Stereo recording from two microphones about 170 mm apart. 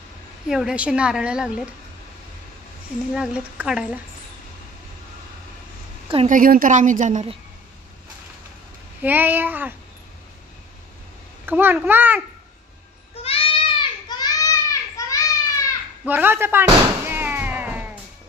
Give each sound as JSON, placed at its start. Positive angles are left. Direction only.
{"t": 0.5, "sound": "a woman's voice", "side_deg": -5}
{"t": 3.2, "sound": "a woman's voice", "side_deg": -5}
{"t": 6.2, "sound": "a woman's voice", "side_deg": -55}
{"t": 9.0, "sound": "speech", "side_deg": -10}
{"t": 11.4, "sound": "speech", "side_deg": -10}
{"t": 13.1, "sound": "a sound", "side_deg": 35}
{"t": 16.1, "sound": "cat", "side_deg": -10}